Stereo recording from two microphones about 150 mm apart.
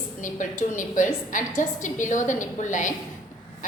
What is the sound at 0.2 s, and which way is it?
A woman's voice, 60° left (ahead or behind).